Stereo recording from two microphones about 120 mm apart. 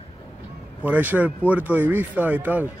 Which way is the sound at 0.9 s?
15° right (ahead or behind).